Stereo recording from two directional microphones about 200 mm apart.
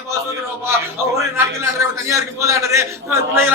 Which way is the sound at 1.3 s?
15° right (ahead or behind).